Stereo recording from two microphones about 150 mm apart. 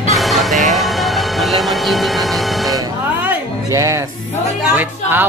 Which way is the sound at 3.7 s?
20° right (ahead or behind).